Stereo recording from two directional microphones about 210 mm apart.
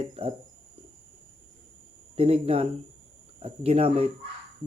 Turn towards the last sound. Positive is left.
turn(degrees=-30)  # may be behind; listen again after turning